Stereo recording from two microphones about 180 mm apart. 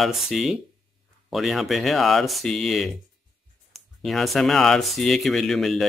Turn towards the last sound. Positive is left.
turn(degrees=0)  # may be behind; listen again after turning